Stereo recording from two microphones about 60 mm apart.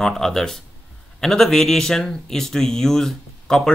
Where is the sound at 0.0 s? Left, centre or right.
Centre.